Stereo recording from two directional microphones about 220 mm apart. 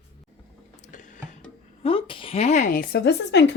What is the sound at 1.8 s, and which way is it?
A woman's voice, 25° left (ahead or behind).